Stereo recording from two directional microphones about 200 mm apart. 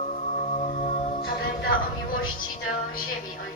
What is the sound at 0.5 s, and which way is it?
Music, 30° left (ahead or behind).